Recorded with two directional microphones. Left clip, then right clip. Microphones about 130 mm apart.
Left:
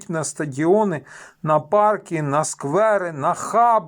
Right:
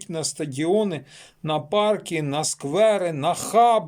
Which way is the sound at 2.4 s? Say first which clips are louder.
Left 6 dB; 10° right (ahead or behind).